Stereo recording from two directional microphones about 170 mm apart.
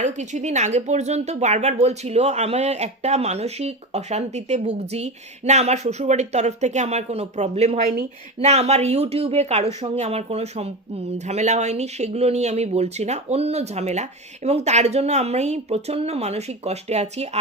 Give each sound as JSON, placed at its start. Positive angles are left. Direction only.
{"t": 0.0, "sound": "speech", "side_deg": -45}